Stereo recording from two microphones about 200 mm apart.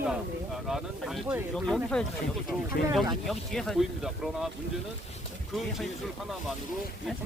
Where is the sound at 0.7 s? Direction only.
Centre (ahead or behind).